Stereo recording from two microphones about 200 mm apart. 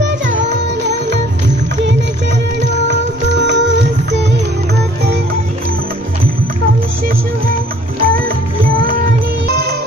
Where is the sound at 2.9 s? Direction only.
60° right (ahead or behind).